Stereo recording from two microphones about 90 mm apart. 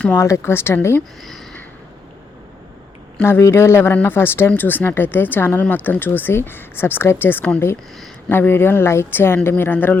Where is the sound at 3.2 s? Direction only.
30° left (ahead or behind).